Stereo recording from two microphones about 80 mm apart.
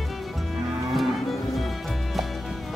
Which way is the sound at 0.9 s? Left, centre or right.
Centre.